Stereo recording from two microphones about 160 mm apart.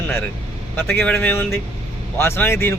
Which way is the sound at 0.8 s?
10° left (ahead or behind).